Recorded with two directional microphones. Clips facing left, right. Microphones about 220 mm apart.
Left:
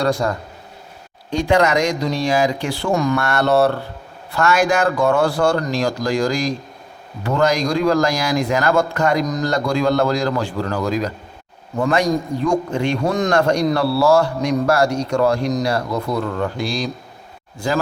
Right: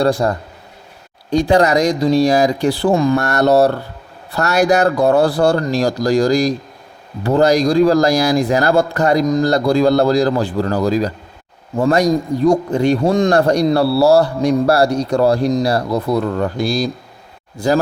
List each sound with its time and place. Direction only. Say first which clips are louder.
0.0 s a man's voice: right 4 dB; 35° right (ahead or behind)